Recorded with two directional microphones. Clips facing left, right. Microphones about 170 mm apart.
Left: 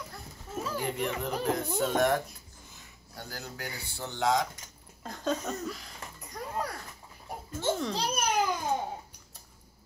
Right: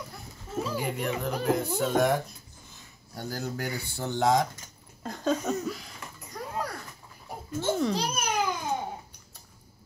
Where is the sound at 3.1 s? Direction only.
40° right (ahead or behind).